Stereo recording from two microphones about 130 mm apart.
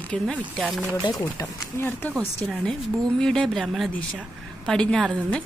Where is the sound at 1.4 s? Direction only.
25° left (ahead or behind).